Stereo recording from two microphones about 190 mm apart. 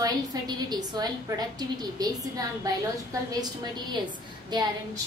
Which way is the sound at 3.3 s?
20° right (ahead or behind).